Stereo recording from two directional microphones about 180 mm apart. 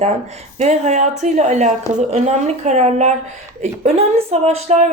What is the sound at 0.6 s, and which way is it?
Speech, 40° right (ahead or behind).